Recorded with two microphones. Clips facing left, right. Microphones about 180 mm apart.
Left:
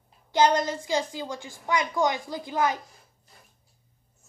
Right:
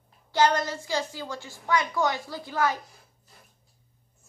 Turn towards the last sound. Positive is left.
turn(degrees=15)  # may be behind; listen again after turning